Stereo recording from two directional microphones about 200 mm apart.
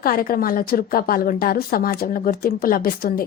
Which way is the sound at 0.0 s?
45° left (ahead or behind).